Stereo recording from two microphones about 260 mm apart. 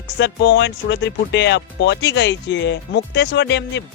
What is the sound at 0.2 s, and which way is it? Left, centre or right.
Speech, left.